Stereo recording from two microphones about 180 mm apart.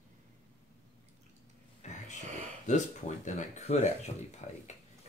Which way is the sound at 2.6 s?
40° left (ahead or behind).